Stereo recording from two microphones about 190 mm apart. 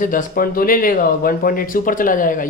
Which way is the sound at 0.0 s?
45° left (ahead or behind).